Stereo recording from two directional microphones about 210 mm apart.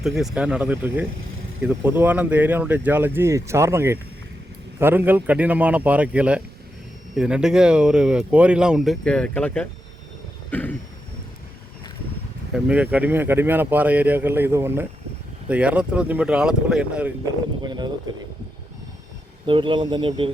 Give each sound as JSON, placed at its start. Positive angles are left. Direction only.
{"t": 0.0, "sound": "speech", "side_deg": 0}
{"t": 10.5, "sound": "a sound", "side_deg": 10}
{"t": 12.5, "sound": "speech", "side_deg": -5}
{"t": 17.6, "sound": "speech", "side_deg": -20}
{"t": 19.5, "sound": "speech", "side_deg": -25}